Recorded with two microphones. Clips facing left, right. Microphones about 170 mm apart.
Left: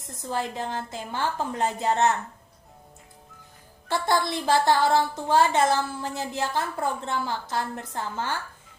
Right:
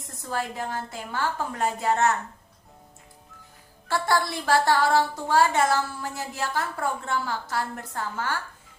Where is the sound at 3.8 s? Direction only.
20° left (ahead or behind).